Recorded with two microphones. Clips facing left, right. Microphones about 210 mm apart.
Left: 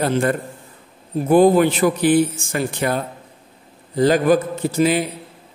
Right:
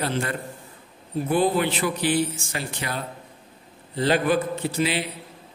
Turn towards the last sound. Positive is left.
turn(degrees=45)  # may be behind; listen again after turning